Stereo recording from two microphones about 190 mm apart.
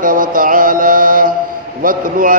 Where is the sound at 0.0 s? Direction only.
45° right (ahead or behind).